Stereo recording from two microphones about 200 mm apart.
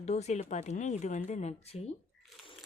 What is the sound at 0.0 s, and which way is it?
Speech, 35° left (ahead or behind).